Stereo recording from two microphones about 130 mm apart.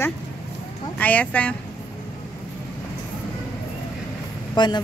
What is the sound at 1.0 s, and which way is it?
Music, 10° left (ahead or behind).